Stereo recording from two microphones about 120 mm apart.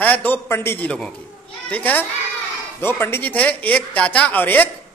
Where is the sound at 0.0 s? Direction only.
15° left (ahead or behind).